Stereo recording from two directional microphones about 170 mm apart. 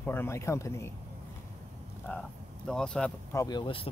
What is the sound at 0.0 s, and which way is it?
Speech, 10° left (ahead or behind).